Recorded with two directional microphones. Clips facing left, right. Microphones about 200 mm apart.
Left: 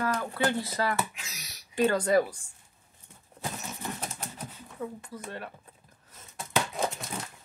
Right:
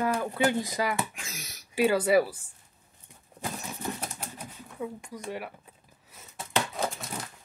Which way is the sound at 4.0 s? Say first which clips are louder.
Even; 10° right (ahead or behind).